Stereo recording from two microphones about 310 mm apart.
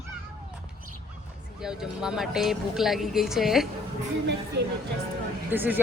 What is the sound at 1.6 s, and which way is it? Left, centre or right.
Speech, centre.